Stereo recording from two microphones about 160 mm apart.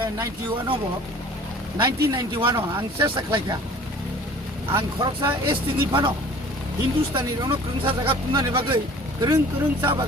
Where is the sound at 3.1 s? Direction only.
25° right (ahead or behind).